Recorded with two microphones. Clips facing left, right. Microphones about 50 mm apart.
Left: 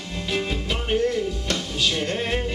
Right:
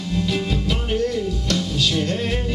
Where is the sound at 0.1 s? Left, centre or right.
Centre.